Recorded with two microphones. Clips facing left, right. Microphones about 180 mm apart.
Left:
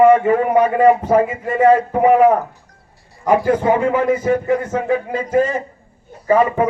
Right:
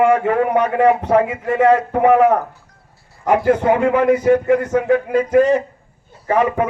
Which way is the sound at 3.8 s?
65° right (ahead or behind).